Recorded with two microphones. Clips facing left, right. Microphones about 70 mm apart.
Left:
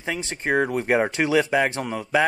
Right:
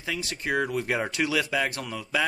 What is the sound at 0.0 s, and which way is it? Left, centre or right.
Speech, left.